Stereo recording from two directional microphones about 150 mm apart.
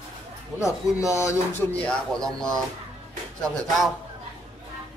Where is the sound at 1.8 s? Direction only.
5° left (ahead or behind).